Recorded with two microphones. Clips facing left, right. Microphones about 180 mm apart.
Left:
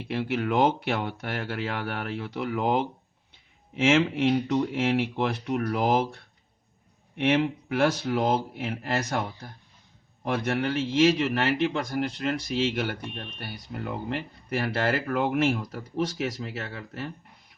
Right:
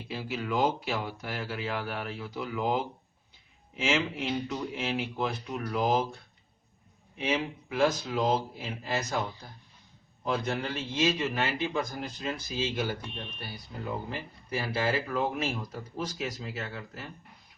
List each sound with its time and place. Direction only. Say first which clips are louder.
0.0 s speech: left 7 dB; 70° left (ahead or behind)
7.2 s speech: left 7 dB; 70° left (ahead or behind)
10.2 s speech: left 4 dB; 70° left (ahead or behind)